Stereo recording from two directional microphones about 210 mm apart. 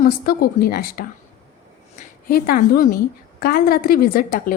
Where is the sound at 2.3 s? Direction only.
45° left (ahead or behind).